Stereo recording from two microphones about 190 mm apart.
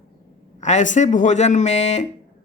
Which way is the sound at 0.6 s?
40° left (ahead or behind).